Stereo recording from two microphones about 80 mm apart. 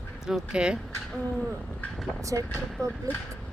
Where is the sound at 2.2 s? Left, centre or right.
Right.